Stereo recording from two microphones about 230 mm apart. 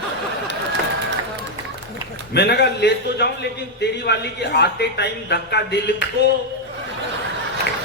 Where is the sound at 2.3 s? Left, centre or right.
Left.